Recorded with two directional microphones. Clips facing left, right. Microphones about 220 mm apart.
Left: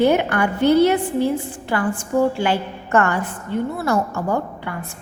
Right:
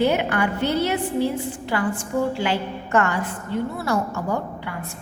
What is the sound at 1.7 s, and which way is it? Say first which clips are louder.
A woman's voice: left 4 dB; 50° left (ahead or behind).